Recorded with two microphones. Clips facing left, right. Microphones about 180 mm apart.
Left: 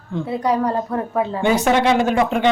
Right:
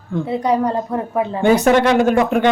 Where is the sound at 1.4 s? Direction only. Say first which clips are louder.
Right 4 dB; 50° right (ahead or behind).